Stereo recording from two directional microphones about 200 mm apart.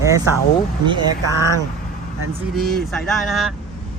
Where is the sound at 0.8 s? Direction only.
20° right (ahead or behind).